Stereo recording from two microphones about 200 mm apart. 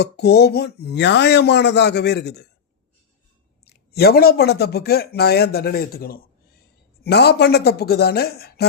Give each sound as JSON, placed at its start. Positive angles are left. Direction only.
{"t": 0.0, "sound": "speech", "side_deg": 55}
{"t": 3.7, "sound": "speech", "side_deg": 50}